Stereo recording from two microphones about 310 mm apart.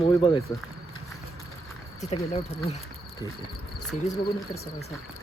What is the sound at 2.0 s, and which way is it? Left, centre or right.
Speech, centre.